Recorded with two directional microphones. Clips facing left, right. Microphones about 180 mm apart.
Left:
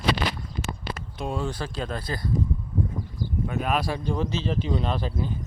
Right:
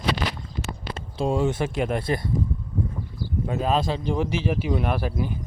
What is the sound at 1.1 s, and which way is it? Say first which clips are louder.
Speech: right 7 dB; 25° right (ahead or behind).